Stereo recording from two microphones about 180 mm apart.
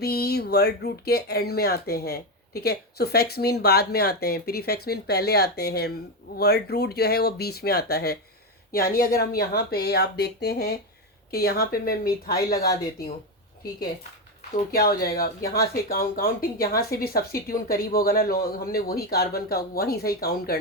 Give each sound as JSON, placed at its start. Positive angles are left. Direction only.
{"t": 0.0, "sound": "speech", "side_deg": 60}
{"t": 14.5, "sound": "speech", "side_deg": 55}